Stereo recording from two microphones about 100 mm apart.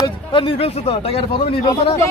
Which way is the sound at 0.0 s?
60° left (ahead or behind).